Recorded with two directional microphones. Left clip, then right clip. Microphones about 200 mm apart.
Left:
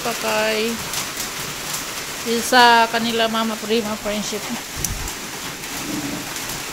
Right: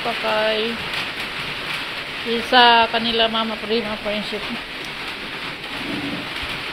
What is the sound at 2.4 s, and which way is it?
Speech, 25° left (ahead or behind).